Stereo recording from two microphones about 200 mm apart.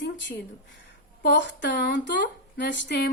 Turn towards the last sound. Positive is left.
turn(degrees=60)  # may be behind; listen again after turning